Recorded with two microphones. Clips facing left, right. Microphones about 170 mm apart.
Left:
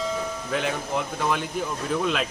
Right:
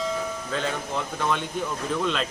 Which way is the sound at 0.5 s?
10° left (ahead or behind).